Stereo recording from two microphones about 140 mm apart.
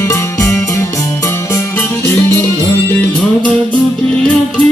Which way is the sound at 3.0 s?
10° left (ahead or behind).